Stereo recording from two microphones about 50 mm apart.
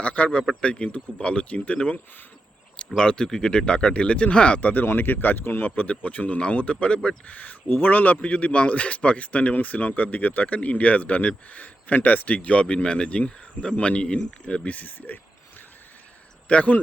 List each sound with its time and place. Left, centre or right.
0.0 s speech: left
4.9 s speech: left
16.5 s speech: left